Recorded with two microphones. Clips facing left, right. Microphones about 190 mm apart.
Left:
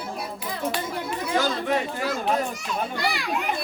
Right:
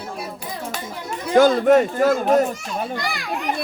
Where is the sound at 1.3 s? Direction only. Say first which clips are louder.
Right 12 dB; 50° right (ahead or behind).